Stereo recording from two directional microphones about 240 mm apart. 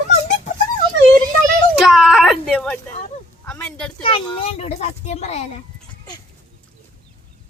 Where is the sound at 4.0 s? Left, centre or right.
Left.